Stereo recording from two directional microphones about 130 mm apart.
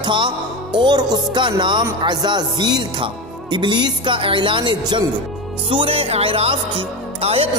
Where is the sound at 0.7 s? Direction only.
35° right (ahead or behind).